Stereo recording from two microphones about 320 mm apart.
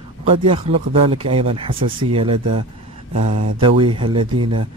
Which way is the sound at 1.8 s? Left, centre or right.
Right.